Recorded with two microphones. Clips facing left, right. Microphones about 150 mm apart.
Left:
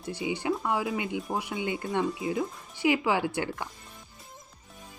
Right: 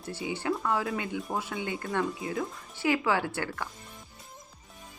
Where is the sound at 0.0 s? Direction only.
15° left (ahead or behind).